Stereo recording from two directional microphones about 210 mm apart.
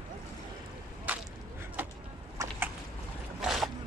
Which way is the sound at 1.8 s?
10° right (ahead or behind).